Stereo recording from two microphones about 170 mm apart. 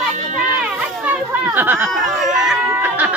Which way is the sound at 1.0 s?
10° right (ahead or behind).